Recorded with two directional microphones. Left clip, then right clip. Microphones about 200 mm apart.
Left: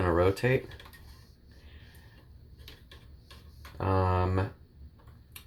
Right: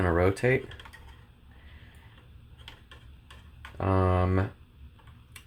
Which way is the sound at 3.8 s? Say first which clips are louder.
Right 2 dB; 40° right (ahead or behind).